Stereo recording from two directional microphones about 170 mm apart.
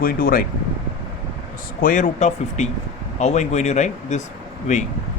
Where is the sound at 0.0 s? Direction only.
55° left (ahead or behind).